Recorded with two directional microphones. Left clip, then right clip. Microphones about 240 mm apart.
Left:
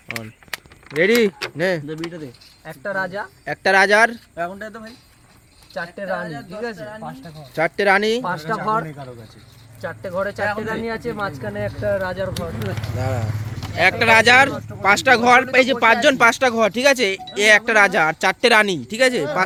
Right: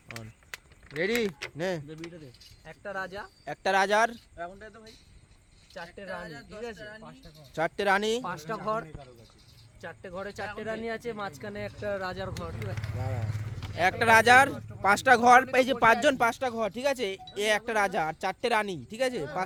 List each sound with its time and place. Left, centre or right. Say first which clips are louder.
0.9 s speech: left 13 dB; centre
2.6 s speech: left 12 dB; right
3.4 s speech: left 10 dB; centre
4.4 s speech: left 17 dB; left
6.0 s speech: left 14 dB; right
7.5 s speech: left 10 dB; right
9.8 s speech: left 14 dB; right
13.0 s speech: left 14 dB; centre
13.7 s speech: left 8 dB; right
16.2 s speech: left 12 dB; centre